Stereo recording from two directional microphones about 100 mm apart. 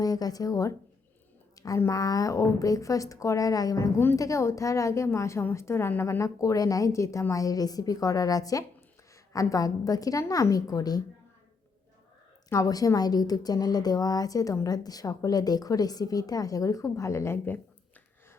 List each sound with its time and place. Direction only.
0.0 s a woman's voice: 40° left (ahead or behind)
1.5 s a sound: 35° left (ahead or behind)
1.9 s a woman's voice: 35° left (ahead or behind)
12.5 s a woman's voice: 35° left (ahead or behind)